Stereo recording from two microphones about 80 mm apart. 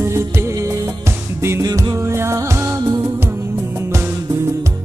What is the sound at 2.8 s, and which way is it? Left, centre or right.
Music, right.